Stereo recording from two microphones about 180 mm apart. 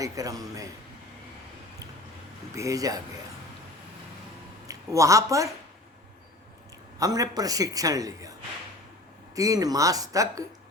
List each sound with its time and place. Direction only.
0.0 s a man's voice: 20° right (ahead or behind)
2.6 s a man's voice: 20° right (ahead or behind)
4.6 s speech: 20° right (ahead or behind)
7.0 s a man's voice: 20° right (ahead or behind)